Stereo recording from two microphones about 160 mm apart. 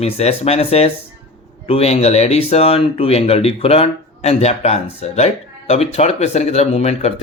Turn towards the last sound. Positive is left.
turn(degrees=40)  # may be behind; listen again after turning